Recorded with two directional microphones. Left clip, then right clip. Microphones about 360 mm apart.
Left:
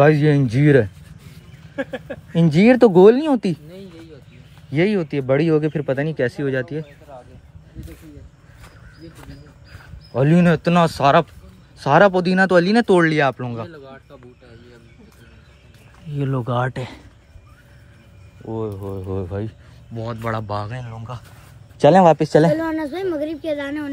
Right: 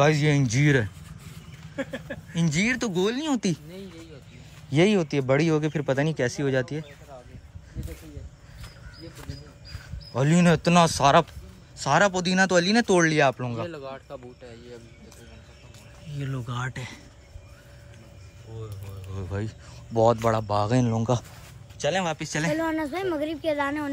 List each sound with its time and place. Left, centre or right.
0.0 s speech: centre
1.8 s speech: centre
7.8 s a sound: centre
9.2 s a sound: centre
11.8 s speech: centre
13.7 s speech: centre
16.1 s speech: centre
19.1 s speech: centre
20.8 s speech: centre
22.0 s speech: centre